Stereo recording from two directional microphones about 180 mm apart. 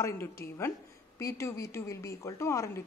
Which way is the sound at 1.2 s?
15° left (ahead or behind).